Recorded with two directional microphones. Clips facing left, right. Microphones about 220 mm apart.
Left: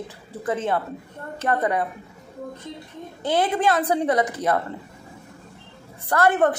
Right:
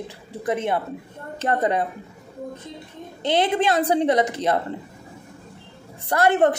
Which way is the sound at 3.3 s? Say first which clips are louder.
Right 1 dB; 25° right (ahead or behind).